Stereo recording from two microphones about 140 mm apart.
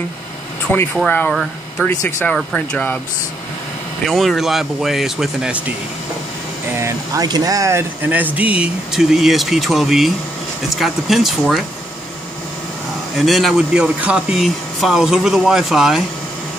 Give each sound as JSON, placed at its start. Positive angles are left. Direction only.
{"t": 0.9, "sound": "speech", "side_deg": 10}
{"t": 2.0, "sound": "speech", "side_deg": 15}
{"t": 4.0, "sound": "speech", "side_deg": 0}
{"t": 6.8, "sound": "speech", "side_deg": -25}
{"t": 13.2, "sound": "speech", "side_deg": 0}